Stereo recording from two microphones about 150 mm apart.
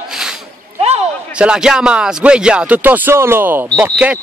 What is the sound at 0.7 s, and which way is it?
Basketball bounce, 45° right (ahead or behind).